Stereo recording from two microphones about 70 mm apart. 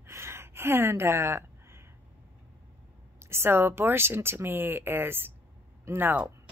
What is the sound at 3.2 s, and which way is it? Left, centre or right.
A woman's voice, right.